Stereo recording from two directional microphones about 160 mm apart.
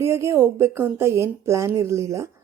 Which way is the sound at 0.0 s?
15° right (ahead or behind).